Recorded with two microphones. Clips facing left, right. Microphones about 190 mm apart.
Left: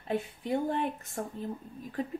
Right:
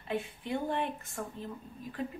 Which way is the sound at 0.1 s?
40° left (ahead or behind).